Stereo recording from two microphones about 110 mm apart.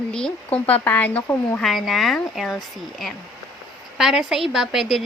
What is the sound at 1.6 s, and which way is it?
A woman's voice, centre (ahead or behind).